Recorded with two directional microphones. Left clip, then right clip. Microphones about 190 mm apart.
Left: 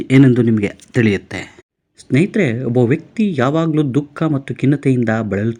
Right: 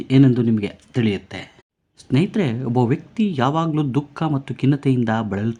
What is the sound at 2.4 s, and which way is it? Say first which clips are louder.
Speech: left 5 dB; 10° left (ahead or behind).